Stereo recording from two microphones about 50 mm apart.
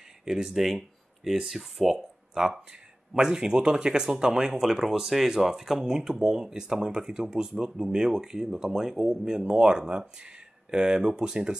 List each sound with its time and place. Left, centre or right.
0.2 s speech: centre